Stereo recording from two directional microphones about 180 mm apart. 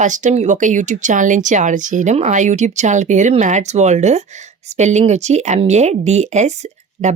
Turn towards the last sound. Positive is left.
turn(degrees=-40)  # may be behind; listen again after turning